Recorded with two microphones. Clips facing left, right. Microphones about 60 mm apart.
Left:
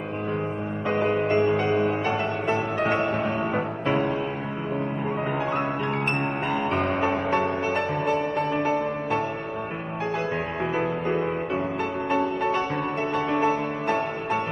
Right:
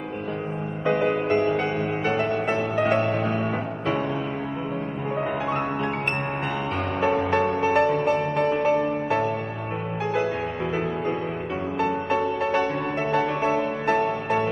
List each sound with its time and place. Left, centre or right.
0.8 s music: left
5.5 s music: left
10.6 s music: left